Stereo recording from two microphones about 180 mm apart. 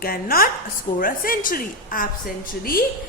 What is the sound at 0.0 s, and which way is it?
A woman's voice, 55° left (ahead or behind).